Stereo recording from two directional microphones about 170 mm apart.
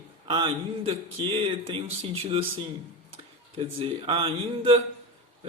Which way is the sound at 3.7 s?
35° right (ahead or behind).